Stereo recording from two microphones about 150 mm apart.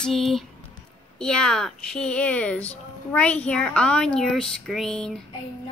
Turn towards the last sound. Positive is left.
turn(degrees=5)  # may be behind; listen again after turning